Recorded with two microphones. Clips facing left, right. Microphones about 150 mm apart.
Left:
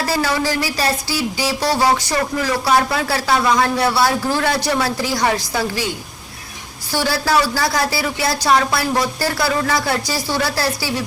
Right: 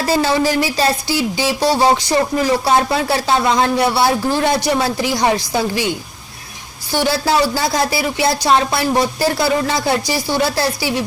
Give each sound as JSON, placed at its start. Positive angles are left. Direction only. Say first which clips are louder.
{"t": 0.0, "sound": "music", "louder": "right 4 dB", "side_deg": -25}
{"t": 6.9, "sound": "music", "louder": "right 2 dB", "side_deg": -20}